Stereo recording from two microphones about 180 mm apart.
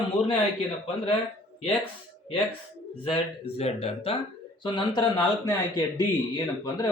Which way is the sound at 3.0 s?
35° left (ahead or behind).